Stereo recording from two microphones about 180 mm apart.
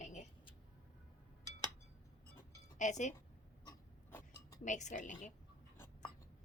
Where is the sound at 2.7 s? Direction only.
40° left (ahead or behind).